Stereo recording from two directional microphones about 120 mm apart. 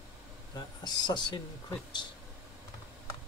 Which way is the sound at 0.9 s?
35° left (ahead or behind).